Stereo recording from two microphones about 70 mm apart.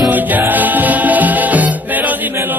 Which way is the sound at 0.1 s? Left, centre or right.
Right.